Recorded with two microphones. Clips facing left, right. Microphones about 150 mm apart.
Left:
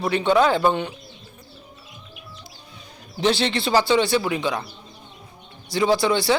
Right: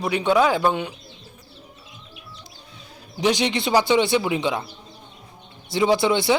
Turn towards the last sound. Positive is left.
turn(degrees=-20)  # may be behind; listen again after turning